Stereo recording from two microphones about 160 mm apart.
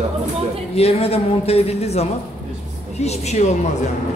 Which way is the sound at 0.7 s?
40° left (ahead or behind).